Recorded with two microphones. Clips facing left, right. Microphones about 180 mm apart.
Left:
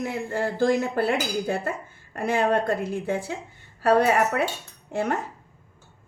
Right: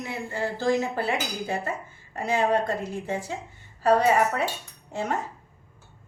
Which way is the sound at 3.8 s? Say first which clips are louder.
Left 1 dB; 60° left (ahead or behind).